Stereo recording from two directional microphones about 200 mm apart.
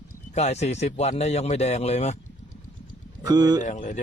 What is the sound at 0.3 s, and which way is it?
Speech, 35° left (ahead or behind).